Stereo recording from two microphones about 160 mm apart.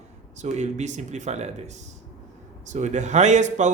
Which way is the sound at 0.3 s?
45° right (ahead or behind).